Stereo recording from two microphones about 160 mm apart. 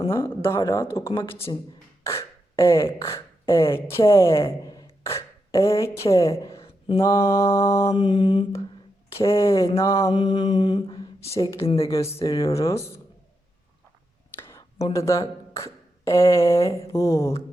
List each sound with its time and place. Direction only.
0.1 s speech: 15° left (ahead or behind)
2.6 s speech: 15° left (ahead or behind)
6.6 s a sound: 35° left (ahead or behind)
7.0 s speech: 20° left (ahead or behind)
7.9 s mantra: 30° left (ahead or behind)
9.1 s speech: 20° left (ahead or behind)
9.7 s mantra: 20° left (ahead or behind); by 11.3 s 35° left (ahead or behind)
11.6 s speech: 35° left (ahead or behind)
11.9 s mantra: 20° left (ahead or behind)
12.5 s speech: 20° left (ahead or behind)
14.3 s a sound: 15° left (ahead or behind)
14.9 s speech: 20° left (ahead or behind)